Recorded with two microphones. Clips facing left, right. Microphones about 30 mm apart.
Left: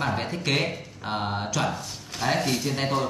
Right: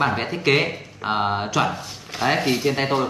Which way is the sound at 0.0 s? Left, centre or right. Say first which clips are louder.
Right 6 dB; right.